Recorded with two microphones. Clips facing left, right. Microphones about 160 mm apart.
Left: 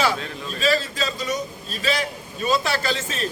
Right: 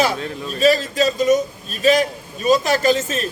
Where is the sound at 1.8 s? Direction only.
45° right (ahead or behind).